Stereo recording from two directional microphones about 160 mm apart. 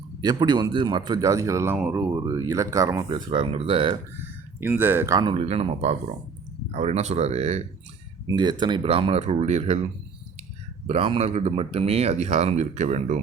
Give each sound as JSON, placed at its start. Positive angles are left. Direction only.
{"t": 0.2, "sound": "speech", "side_deg": -25}
{"t": 4.2, "sound": "speech", "side_deg": -10}
{"t": 5.3, "sound": "speech", "side_deg": -40}
{"t": 8.3, "sound": "speech", "side_deg": -25}
{"t": 10.8, "sound": "speech", "side_deg": -35}